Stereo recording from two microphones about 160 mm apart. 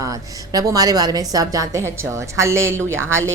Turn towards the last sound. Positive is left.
turn(degrees=-15)  # may be behind; listen again after turning